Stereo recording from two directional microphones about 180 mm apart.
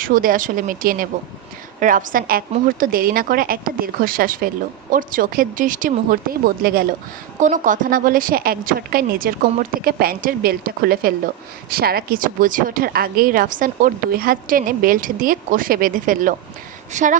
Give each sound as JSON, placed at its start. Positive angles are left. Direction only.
{"t": 0.0, "sound": "a woman's voice", "side_deg": -50}
{"t": 7.3, "sound": "a woman's voice", "side_deg": -45}